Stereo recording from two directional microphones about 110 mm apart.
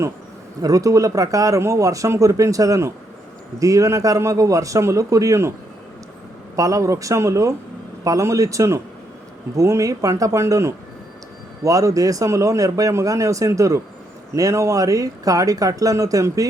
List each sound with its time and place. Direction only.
0.6 s a man's voice: 30° right (ahead or behind)
6.6 s a man's voice: 30° right (ahead or behind)